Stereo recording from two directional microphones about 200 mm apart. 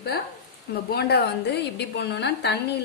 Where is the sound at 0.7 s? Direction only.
55° left (ahead or behind).